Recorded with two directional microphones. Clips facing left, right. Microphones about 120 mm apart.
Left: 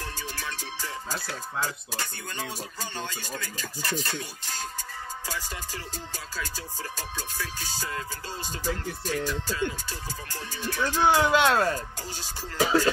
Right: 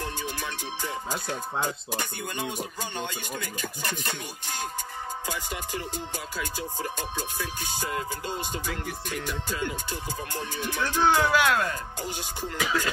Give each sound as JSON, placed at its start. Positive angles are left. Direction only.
{"t": 0.0, "sound": "music", "side_deg": -20}
{"t": 3.0, "sound": "speech", "side_deg": -15}
{"t": 5.2, "sound": "music", "side_deg": -20}
{"t": 9.1, "sound": "speech", "side_deg": -15}
{"t": 11.0, "sound": "speech", "side_deg": 15}
{"t": 12.0, "sound": "speech", "side_deg": -15}
{"t": 12.5, "sound": "music", "side_deg": 35}